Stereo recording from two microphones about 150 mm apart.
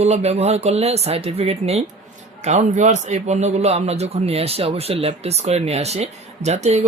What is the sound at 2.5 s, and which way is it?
A man's voice, 55° right (ahead or behind).